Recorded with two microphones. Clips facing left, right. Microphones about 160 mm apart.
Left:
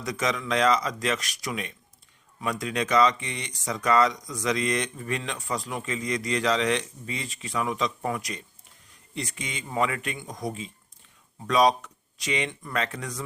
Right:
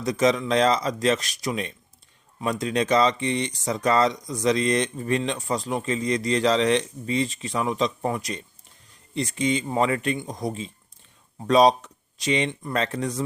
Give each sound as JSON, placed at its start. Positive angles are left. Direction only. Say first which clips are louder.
{"t": 0.0, "sound": "speech", "louder": "right 7 dB", "side_deg": -30}